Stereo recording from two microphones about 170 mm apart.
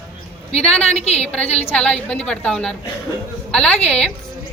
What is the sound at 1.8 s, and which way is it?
A woman's voice, 5° left (ahead or behind).